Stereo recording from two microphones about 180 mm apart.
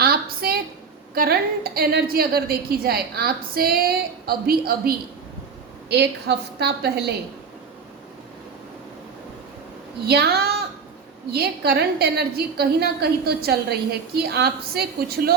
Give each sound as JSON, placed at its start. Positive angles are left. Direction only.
{"t": 0.0, "sound": "a sound", "side_deg": -55}
{"t": 1.1, "sound": "a woman's voice", "side_deg": -55}
{"t": 5.9, "sound": "a woman's voice", "side_deg": -70}
{"t": 10.1, "sound": "a woman's voice", "side_deg": -60}